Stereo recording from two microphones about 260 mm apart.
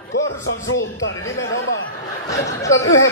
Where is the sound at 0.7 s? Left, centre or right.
Left.